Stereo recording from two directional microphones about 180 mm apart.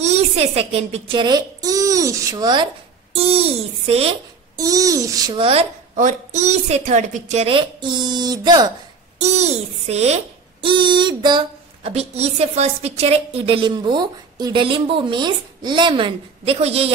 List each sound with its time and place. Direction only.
0.0 s speech: 35° right (ahead or behind)
4.6 s a child's voice: 20° right (ahead or behind)
5.9 s a woman's voice: 45° right (ahead or behind); by 8.7 s 20° right (ahead or behind)
9.2 s a child's voice: 35° right (ahead or behind)